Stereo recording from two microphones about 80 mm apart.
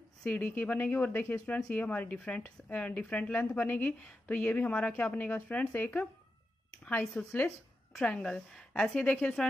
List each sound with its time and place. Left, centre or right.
0.2 s a woman's voice: centre